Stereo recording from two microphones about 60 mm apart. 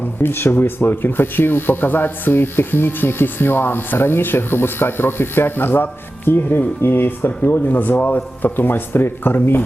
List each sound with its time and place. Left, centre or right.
0.2 s speech: left